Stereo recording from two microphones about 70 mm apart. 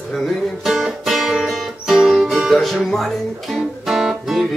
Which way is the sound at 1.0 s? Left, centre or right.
Centre.